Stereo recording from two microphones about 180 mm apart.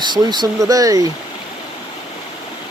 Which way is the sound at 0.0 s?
25° right (ahead or behind).